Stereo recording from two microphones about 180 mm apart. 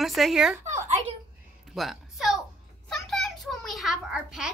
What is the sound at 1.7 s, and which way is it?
A woman's voice, centre (ahead or behind).